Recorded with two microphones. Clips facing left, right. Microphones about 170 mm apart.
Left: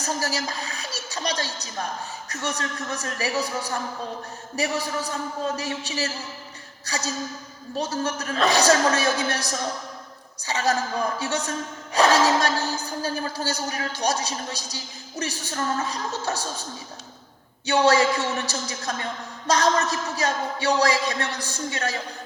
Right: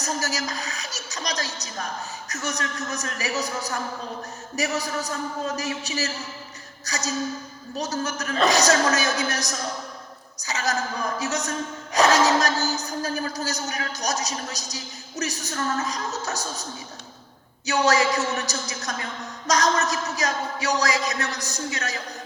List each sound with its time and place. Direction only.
0.2 s a woman's voice: 30° left (ahead or behind)
17.7 s speech: 30° left (ahead or behind)